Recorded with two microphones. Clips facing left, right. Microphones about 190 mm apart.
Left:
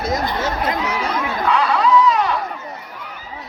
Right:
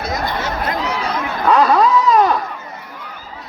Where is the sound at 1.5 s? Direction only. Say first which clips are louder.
Right 5 dB; 40° right (ahead or behind).